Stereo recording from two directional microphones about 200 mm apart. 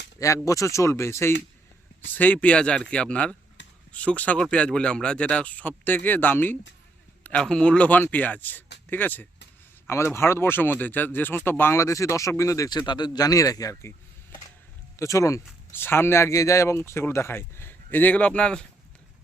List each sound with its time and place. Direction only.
0.4 s speech: 15° left (ahead or behind)
3.6 s a sound: 65° left (ahead or behind)
3.9 s speech: 5° left (ahead or behind)
14.9 s speech: 15° left (ahead or behind)